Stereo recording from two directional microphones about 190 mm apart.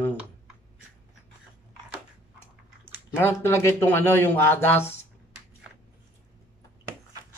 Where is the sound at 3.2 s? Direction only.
10° left (ahead or behind).